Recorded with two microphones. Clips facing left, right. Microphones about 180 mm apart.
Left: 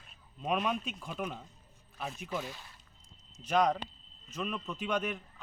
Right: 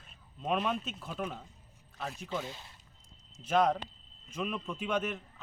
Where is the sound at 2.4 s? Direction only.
20° right (ahead or behind).